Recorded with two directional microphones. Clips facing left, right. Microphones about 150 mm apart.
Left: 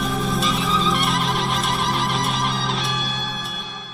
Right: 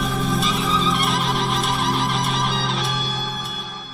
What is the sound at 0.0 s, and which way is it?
Music, centre (ahead or behind).